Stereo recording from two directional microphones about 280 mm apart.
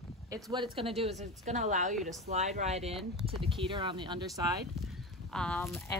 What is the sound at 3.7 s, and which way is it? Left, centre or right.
Speech, centre.